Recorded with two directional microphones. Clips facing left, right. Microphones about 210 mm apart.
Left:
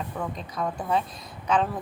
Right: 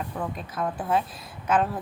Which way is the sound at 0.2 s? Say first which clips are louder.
Right 1 dB; 5° right (ahead or behind).